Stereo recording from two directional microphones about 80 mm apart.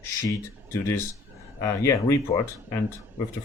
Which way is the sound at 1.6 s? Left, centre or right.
Left.